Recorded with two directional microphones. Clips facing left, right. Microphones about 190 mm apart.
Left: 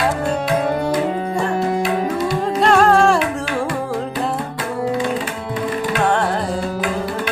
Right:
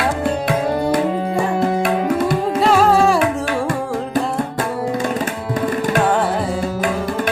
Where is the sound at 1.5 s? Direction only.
55° right (ahead or behind).